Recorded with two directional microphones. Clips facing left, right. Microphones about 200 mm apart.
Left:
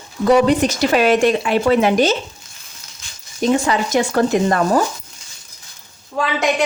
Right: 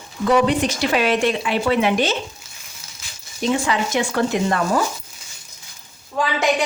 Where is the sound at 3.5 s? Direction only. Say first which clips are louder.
Left 3 dB; 40° left (ahead or behind).